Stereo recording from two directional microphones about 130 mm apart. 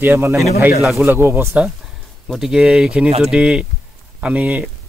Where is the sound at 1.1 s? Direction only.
20° right (ahead or behind).